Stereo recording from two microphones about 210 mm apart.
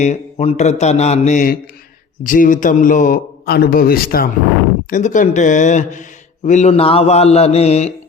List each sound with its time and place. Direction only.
0.0 s a man's voice: 35° left (ahead or behind)